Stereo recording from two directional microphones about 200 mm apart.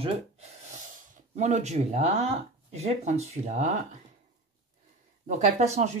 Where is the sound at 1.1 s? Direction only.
35° right (ahead or behind).